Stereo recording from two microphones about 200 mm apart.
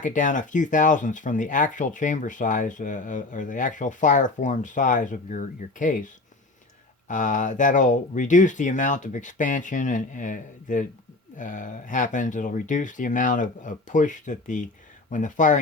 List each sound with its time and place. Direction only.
0.0 s speech: 40° left (ahead or behind)
7.1 s speech: 40° left (ahead or behind)